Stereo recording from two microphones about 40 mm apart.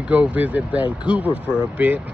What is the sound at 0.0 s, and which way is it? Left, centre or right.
Speech, right.